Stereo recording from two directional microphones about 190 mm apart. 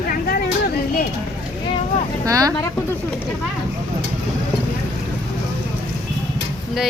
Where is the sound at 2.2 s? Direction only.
20° right (ahead or behind).